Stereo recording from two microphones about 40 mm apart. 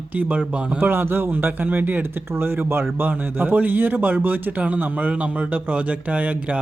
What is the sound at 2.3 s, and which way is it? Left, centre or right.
Speech, right.